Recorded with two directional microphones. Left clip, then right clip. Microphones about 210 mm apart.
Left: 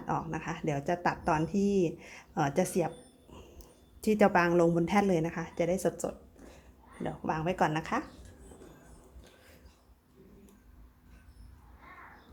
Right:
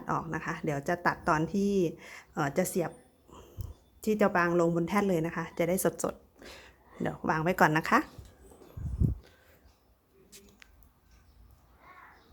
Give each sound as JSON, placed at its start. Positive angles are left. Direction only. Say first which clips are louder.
{"t": 0.0, "sound": "speech", "louder": "right 1 dB", "side_deg": -10}
{"t": 4.0, "sound": "a woman's voice", "louder": "left 1 dB", "side_deg": 0}